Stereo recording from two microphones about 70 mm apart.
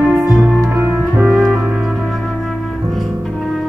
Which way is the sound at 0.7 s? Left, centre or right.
Right.